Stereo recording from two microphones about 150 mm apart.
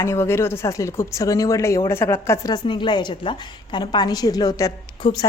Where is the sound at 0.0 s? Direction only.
20° left (ahead or behind).